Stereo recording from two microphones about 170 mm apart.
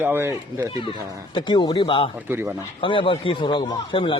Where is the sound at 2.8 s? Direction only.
30° left (ahead or behind).